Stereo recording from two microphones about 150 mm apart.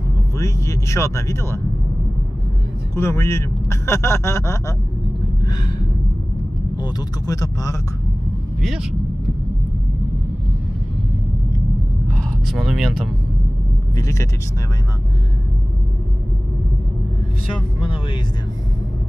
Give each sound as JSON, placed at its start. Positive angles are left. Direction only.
{"t": 0.4, "sound": "speech", "side_deg": 20}
{"t": 3.0, "sound": "speech", "side_deg": 20}
{"t": 6.8, "sound": "speech", "side_deg": 25}
{"t": 8.5, "sound": "speech", "side_deg": 0}
{"t": 12.1, "sound": "speech", "side_deg": 5}
{"t": 13.9, "sound": "speech", "side_deg": 20}